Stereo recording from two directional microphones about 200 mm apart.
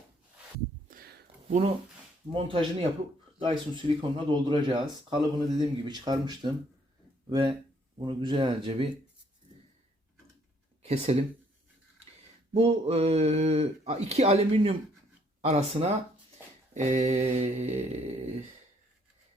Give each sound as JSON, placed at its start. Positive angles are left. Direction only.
{"t": 0.9, "sound": "a sound", "side_deg": -45}
{"t": 2.3, "sound": "speech", "side_deg": -25}
{"t": 10.8, "sound": "speech", "side_deg": -30}
{"t": 12.5, "sound": "speech", "side_deg": -30}